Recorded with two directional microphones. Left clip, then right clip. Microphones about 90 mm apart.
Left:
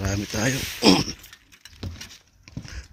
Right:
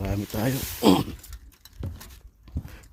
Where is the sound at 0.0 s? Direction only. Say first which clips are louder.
Left 3 dB; 20° right (ahead or behind).